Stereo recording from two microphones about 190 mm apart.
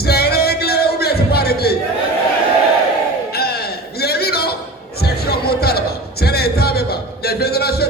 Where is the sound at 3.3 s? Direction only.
55° left (ahead or behind).